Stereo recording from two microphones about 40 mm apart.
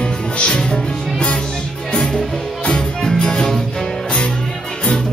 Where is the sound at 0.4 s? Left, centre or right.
Left.